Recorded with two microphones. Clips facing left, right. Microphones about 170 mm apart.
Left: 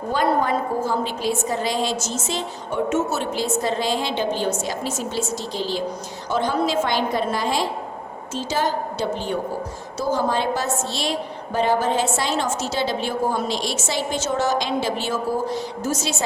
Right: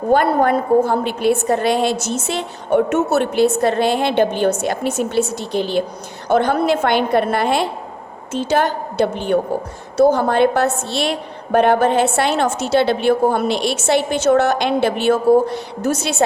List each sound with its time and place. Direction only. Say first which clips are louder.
0.1 s a woman's voice: right 6 dB; 60° right (ahead or behind)